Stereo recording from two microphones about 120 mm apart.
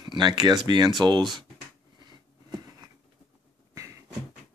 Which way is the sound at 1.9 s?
40° right (ahead or behind).